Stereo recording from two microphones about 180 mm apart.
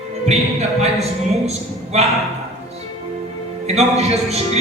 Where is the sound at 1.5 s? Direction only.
35° right (ahead or behind).